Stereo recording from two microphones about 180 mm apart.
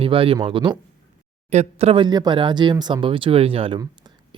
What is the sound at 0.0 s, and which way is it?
Speech, 30° right (ahead or behind).